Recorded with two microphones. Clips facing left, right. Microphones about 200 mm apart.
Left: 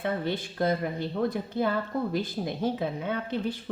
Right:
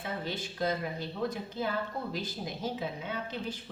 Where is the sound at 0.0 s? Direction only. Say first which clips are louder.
Left 7 dB; 55° left (ahead or behind).